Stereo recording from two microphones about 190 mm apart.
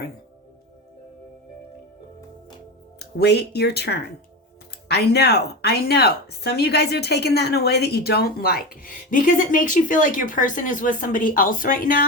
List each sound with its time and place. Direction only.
3.0 s a woman's voice: 60° left (ahead or behind)